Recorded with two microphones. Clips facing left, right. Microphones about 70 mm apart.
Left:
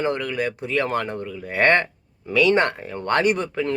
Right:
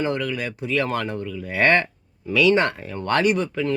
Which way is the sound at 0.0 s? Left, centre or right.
Left.